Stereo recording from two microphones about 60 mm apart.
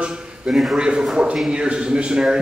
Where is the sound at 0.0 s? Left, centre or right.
Centre.